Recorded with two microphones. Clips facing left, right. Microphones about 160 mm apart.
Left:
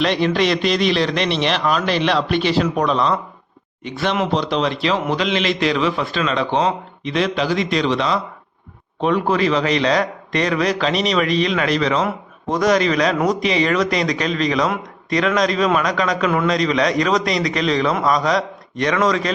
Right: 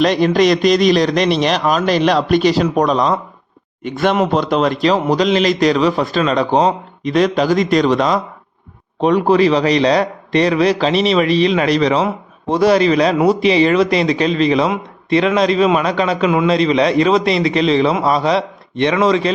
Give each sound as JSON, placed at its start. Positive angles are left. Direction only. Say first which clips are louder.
{"t": 0.0, "sound": "a man's voice", "louder": "right 5 dB", "side_deg": -45}